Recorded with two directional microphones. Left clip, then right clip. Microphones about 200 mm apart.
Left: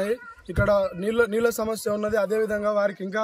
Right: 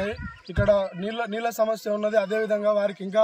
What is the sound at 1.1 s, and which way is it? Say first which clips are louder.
Speech: left 7 dB; 35° left (ahead or behind).